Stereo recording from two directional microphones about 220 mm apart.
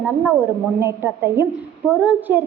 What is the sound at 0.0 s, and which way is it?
A woman's voice, 10° right (ahead or behind).